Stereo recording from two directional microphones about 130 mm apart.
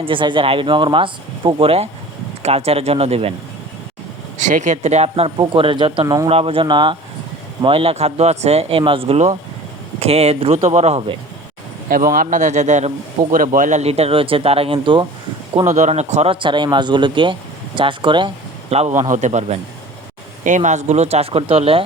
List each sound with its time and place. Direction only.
0.0 s speech: 40° right (ahead or behind)
4.4 s speech: 70° right (ahead or behind)
11.9 s a man's voice: 90° right; by 12.9 s 65° right (ahead or behind)
13.3 s speech: 90° right; by 15.0 s 40° right (ahead or behind)
15.6 s speech: 65° right (ahead or behind); by 18.3 s 40° right (ahead or behind)
18.7 s speech: 60° right (ahead or behind)